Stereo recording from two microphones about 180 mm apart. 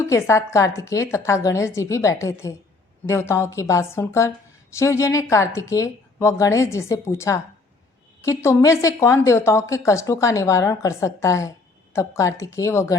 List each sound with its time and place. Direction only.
0.0 s a woman's voice: 15° left (ahead or behind)